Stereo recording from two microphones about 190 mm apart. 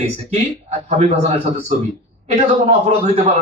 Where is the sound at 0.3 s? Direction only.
35° right (ahead or behind).